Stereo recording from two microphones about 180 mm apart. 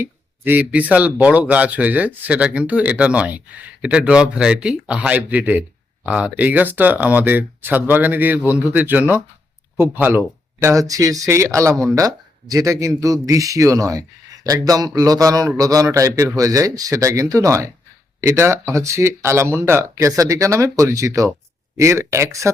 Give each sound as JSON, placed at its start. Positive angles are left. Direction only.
{"t": 0.0, "sound": "speech", "side_deg": -10}